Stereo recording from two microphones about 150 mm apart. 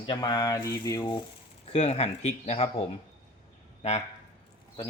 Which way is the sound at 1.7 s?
45° left (ahead or behind).